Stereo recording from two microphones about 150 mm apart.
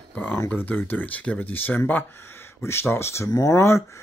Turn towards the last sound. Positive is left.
turn(degrees=20)  # may be behind; listen again after turning